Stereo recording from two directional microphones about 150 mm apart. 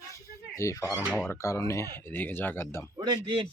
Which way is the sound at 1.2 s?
20° left (ahead or behind).